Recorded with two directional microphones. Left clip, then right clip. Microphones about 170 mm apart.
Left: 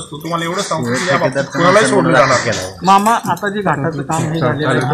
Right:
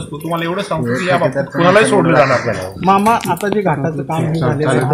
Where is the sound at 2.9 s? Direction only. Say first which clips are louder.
Left 1 dB; 35° right (ahead or behind).